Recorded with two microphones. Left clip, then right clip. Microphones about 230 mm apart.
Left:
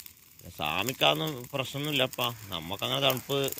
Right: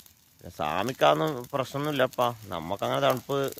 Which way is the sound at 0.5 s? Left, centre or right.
Centre.